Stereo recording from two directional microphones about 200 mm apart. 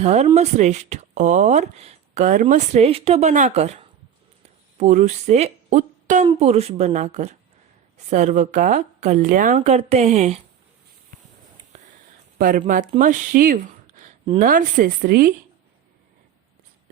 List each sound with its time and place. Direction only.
0.0 s a woman's voice: 35° right (ahead or behind)
12.4 s a woman's voice: 40° right (ahead or behind)